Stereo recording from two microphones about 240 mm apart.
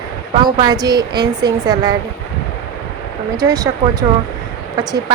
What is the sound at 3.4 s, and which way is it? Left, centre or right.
Speech, centre.